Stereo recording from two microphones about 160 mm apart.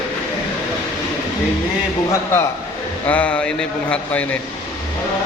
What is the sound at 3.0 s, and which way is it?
Speech, 10° left (ahead or behind).